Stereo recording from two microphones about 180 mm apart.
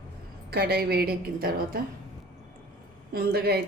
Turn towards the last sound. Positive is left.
turn(degrees=-60)  # may be behind; listen again after turning